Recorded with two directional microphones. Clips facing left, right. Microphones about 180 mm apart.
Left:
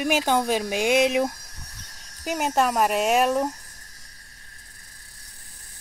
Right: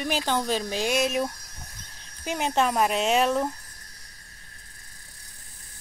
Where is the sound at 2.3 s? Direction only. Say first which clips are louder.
Left 2 dB; 5° left (ahead or behind).